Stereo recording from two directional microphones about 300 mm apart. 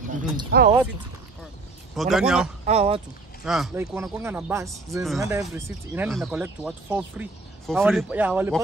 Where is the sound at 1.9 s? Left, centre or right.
Centre.